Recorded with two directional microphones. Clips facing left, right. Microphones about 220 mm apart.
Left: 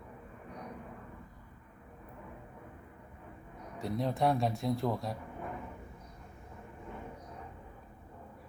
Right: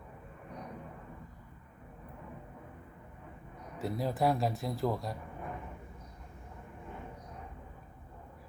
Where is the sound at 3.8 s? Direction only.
5° right (ahead or behind).